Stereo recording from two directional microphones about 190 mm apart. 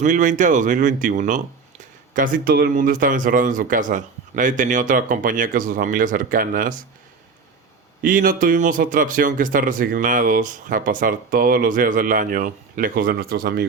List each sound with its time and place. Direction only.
0.0 s speech: 40° right (ahead or behind)
8.0 s speech: 45° right (ahead or behind)